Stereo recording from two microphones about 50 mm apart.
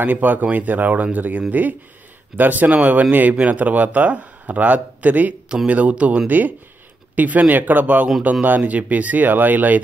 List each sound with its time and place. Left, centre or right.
0.0 s speech: right